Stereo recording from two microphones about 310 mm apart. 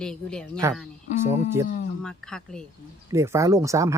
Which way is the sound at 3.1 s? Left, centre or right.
Centre.